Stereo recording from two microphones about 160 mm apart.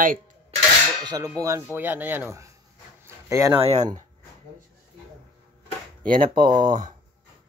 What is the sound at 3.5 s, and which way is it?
Speech, 40° right (ahead or behind).